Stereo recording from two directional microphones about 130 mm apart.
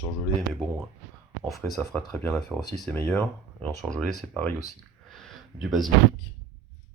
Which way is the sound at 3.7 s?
65° right (ahead or behind).